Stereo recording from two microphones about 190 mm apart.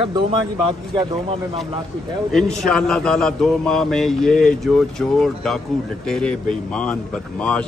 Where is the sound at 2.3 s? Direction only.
5° left (ahead or behind).